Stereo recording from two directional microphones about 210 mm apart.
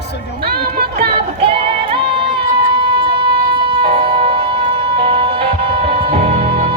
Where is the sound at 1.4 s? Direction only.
25° right (ahead or behind).